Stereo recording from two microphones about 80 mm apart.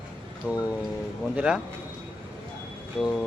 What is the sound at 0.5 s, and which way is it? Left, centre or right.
Speech, centre.